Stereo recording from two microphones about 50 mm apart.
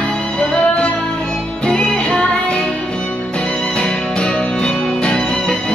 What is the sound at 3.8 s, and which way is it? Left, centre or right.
Music, centre.